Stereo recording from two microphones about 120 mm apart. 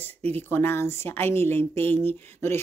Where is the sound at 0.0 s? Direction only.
15° left (ahead or behind).